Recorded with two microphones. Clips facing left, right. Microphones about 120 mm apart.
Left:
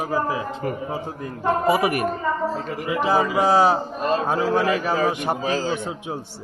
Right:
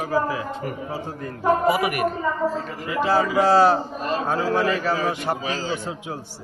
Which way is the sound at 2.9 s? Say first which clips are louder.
Even; 20° left (ahead or behind).